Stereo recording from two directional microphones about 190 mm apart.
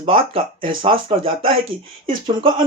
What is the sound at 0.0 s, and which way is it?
Speech, 30° right (ahead or behind).